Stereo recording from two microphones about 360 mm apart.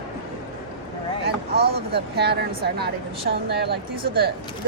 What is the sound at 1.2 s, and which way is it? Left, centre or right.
A woman's voice, right.